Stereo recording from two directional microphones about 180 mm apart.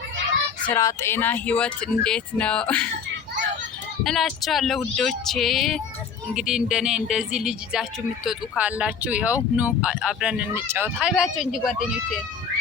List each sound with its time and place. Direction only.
0.7 s speech: 15° left (ahead or behind)
4.0 s speech: centre (ahead or behind)